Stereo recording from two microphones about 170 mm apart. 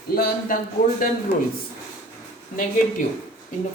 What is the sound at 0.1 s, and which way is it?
Speech, 60° left (ahead or behind).